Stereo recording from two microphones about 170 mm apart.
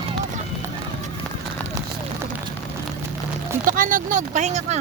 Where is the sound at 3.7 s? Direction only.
50° right (ahead or behind).